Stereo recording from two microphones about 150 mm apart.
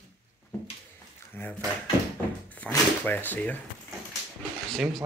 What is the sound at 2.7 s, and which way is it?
Speech, 15° left (ahead or behind).